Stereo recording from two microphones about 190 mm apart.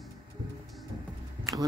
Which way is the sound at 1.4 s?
15° right (ahead or behind).